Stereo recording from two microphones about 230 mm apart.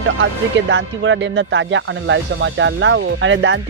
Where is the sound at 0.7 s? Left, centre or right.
Right.